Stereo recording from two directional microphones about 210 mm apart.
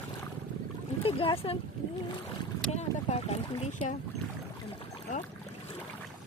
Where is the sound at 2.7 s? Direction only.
30° left (ahead or behind).